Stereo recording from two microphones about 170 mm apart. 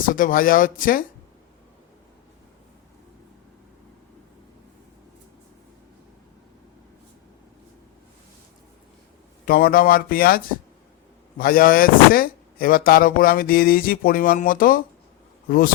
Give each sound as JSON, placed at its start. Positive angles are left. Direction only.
{"t": 0.0, "sound": "speech", "side_deg": 50}
{"t": 9.5, "sound": "speech", "side_deg": 60}